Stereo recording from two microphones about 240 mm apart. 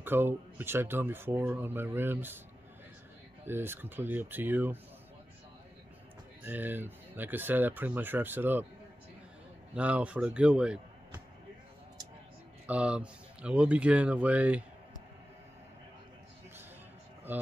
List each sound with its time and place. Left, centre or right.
0.0 s speech: centre
3.4 s speech: centre
6.4 s speech: centre
9.8 s a man's voice: centre
12.6 s a man's voice: centre
17.3 s speech: centre